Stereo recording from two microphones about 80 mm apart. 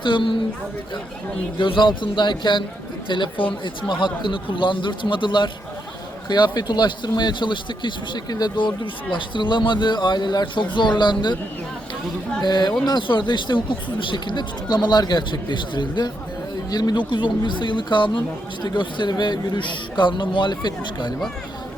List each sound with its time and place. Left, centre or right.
0.0 s speech: left
1.5 s speech: left
3.1 s speech: left
6.2 s speech: left
12.4 s speech: left
16.6 s speech: left